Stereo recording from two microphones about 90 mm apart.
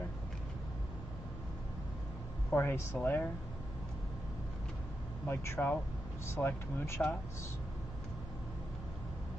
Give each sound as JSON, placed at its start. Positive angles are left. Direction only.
{"t": 2.5, "sound": "speech", "side_deg": 25}
{"t": 5.2, "sound": "speech", "side_deg": 25}